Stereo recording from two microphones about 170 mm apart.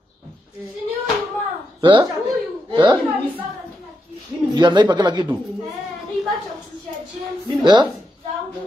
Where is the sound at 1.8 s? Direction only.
25° right (ahead or behind).